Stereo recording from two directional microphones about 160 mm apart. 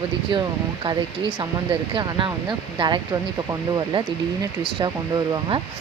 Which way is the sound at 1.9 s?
30° right (ahead or behind).